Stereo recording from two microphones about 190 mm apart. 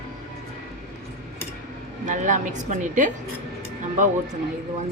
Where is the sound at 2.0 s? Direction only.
40° right (ahead or behind).